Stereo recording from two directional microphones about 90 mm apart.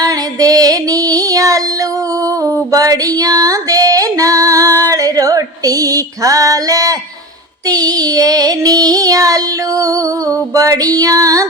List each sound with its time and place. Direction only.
0.0 s female singing: 40° right (ahead or behind)
7.7 s child singing: 45° right (ahead or behind)